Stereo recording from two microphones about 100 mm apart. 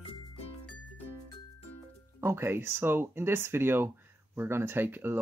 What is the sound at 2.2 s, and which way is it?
Speech, 25° right (ahead or behind).